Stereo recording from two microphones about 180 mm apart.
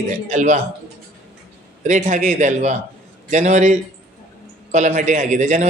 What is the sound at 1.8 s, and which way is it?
A man's voice, 40° right (ahead or behind).